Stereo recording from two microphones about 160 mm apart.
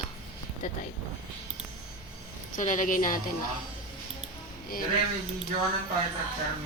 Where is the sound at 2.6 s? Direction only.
55° left (ahead or behind).